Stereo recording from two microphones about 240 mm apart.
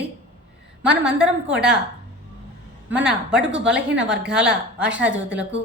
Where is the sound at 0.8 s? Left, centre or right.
Centre.